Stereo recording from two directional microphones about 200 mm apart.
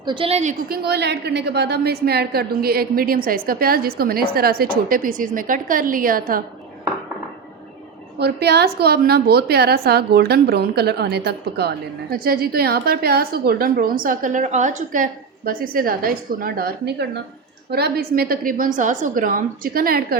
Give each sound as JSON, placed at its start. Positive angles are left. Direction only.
{"t": 0.0, "sound": "a woman's voice", "side_deg": -25}
{"t": 0.7, "sound": "a woman's voice", "side_deg": -55}
{"t": 8.2, "sound": "a woman's voice", "side_deg": -55}